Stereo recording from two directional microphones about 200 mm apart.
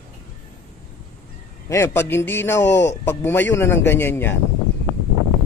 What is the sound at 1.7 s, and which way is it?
A man's voice, 10° left (ahead or behind).